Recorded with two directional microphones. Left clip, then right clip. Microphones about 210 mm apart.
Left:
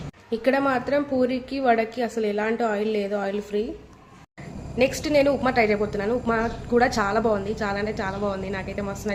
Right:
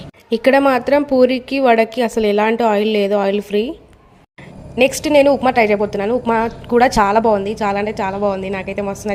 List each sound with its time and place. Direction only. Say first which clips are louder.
0.3 s a woman's voice: right 9 dB; 45° right (ahead or behind)
4.8 s a woman's voice: right 8 dB; 40° right (ahead or behind)